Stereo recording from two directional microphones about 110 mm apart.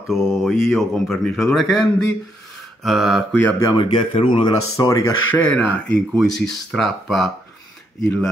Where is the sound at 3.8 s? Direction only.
50° left (ahead or behind).